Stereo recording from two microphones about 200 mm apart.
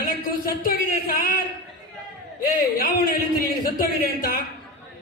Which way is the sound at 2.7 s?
50° left (ahead or behind).